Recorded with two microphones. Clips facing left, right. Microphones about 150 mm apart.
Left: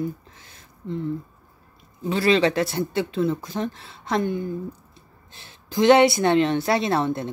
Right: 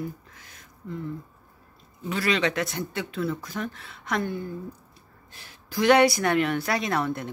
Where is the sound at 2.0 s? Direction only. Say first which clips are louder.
Left 6 dB; 30° left (ahead or behind).